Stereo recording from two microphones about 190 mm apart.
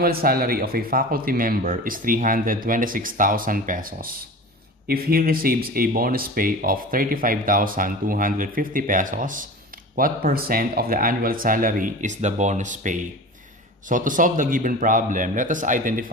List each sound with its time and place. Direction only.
0.0 s speech: 50° right (ahead or behind)